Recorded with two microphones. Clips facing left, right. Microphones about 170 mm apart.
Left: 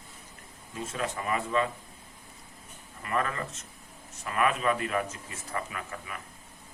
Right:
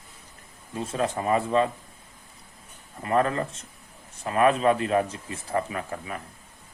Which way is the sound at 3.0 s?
30° right (ahead or behind).